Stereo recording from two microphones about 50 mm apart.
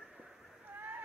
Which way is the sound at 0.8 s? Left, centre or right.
Right.